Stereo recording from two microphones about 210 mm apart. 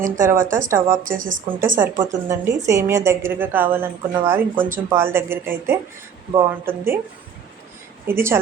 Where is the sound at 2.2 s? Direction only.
15° right (ahead or behind).